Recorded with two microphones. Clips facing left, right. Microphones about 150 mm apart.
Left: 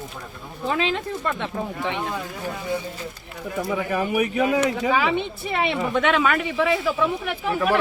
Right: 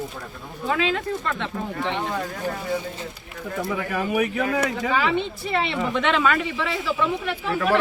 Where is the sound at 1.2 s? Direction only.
15° left (ahead or behind).